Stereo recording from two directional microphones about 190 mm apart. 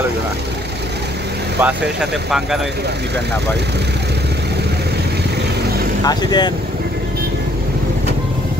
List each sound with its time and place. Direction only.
1.6 s speech: 5° right (ahead or behind)
6.0 s speech: 20° left (ahead or behind)